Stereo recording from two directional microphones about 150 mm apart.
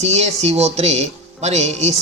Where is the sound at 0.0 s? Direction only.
45° right (ahead or behind).